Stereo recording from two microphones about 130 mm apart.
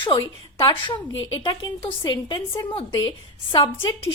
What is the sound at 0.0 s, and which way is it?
A woman's voice, 35° left (ahead or behind).